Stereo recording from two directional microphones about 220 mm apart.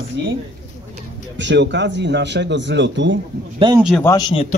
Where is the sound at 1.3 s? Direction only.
55° right (ahead or behind).